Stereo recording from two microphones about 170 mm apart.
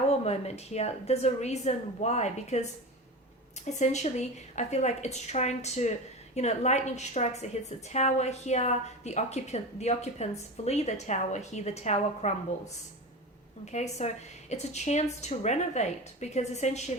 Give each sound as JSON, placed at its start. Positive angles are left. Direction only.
{"t": 0.1, "sound": "a woman's voice", "side_deg": 40}
{"t": 3.7, "sound": "a woman's voice", "side_deg": 45}